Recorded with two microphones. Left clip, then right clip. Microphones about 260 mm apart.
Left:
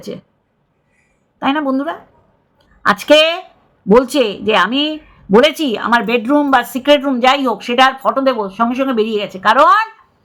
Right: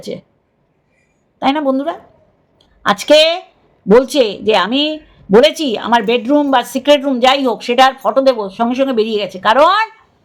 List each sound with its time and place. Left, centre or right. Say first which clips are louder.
0.1 s a woman's voice: right 4 dB; centre
1.4 s a woman's voice: right 2 dB; centre